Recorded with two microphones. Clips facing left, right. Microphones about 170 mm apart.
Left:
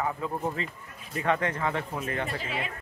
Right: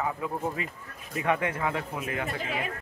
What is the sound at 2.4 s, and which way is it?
Speech, 45° right (ahead or behind).